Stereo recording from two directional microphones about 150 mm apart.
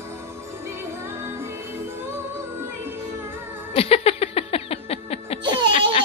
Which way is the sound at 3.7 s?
40° left (ahead or behind).